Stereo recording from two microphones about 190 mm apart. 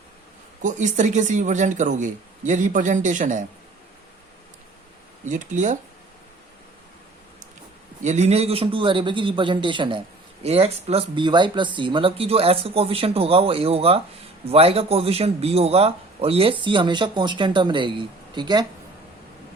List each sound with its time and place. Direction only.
0.6 s speech: 40° right (ahead or behind)
5.2 s speech: 40° right (ahead or behind)
8.0 s a man's voice: 35° right (ahead or behind)